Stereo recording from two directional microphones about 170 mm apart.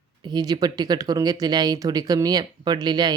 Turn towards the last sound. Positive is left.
turn(degrees=-25)  # may be behind; listen again after turning